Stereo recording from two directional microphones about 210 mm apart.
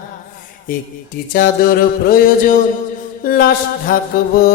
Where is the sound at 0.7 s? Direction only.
40° left (ahead or behind).